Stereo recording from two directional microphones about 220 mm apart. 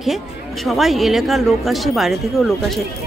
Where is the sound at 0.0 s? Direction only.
Centre (ahead or behind).